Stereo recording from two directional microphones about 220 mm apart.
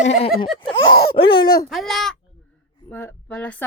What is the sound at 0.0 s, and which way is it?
Speech, 30° left (ahead or behind).